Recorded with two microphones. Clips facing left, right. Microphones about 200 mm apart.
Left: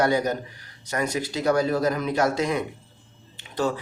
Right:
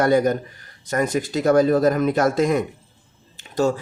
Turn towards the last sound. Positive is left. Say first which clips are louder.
# right 5 dB
turn(degrees=-45)  # may be behind; listen again after turning